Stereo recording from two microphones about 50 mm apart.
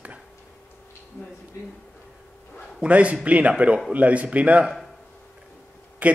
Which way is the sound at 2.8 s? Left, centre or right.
Right.